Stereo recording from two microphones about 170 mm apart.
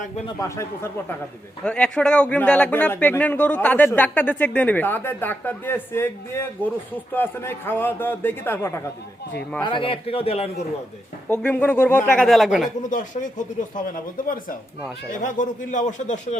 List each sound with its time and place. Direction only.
0.3 s speech: 20° left (ahead or behind)
1.6 s speech: 5° left (ahead or behind)
9.6 s a man's voice: 30° left (ahead or behind)
11.4 s speech: 10° left (ahead or behind)
12.8 s speech: 50° left (ahead or behind)